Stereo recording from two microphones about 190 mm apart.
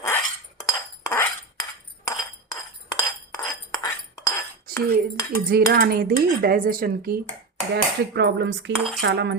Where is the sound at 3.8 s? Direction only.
15° left (ahead or behind).